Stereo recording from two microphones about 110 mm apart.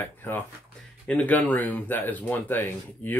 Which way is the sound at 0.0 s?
20° left (ahead or behind).